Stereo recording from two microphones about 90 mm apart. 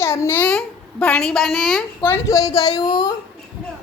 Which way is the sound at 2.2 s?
40° left (ahead or behind).